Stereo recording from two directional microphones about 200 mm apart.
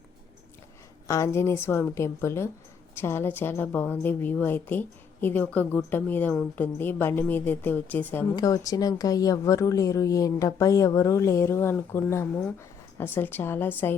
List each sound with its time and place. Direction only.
1.0 s a woman's voice: 15° left (ahead or behind)